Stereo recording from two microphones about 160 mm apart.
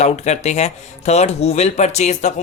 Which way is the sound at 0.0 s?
45° left (ahead or behind).